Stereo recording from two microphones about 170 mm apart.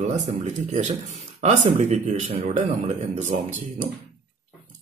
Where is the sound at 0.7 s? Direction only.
45° right (ahead or behind).